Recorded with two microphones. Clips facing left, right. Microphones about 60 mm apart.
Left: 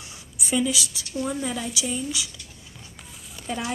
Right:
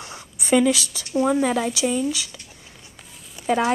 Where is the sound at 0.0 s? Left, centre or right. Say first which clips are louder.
Right 3 dB; right.